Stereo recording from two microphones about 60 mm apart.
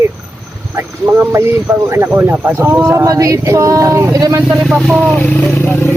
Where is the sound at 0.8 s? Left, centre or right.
Right.